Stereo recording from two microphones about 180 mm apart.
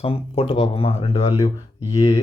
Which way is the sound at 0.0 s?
30° left (ahead or behind).